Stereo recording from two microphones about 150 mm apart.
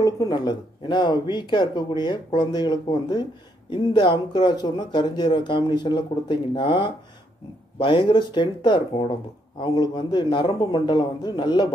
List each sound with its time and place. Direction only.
0.0 s speech: 25° left (ahead or behind)